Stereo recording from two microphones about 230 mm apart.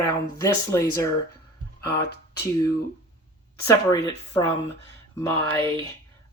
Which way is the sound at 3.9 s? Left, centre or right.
Centre.